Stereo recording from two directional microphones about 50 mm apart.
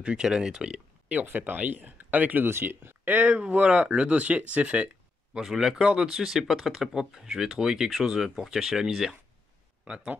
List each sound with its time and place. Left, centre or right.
0.0 s speech: centre
1.2 s speech: right
2.4 s speech: right
3.1 s speech: right
5.4 s speech: centre